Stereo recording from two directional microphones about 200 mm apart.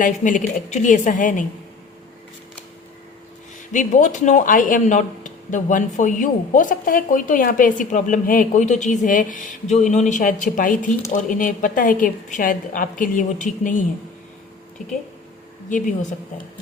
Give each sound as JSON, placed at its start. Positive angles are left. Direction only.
{"t": 0.0, "sound": "speech", "side_deg": 40}
{"t": 3.7, "sound": "speech", "side_deg": 40}
{"t": 15.7, "sound": "speech", "side_deg": 40}